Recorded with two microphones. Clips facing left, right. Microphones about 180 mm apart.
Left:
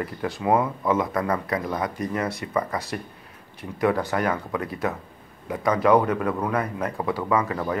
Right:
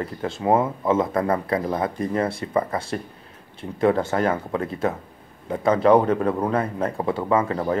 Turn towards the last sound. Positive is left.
turn(degrees=-30)  # may be behind; listen again after turning